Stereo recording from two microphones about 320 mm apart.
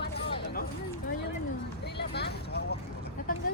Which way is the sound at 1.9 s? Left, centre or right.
Left.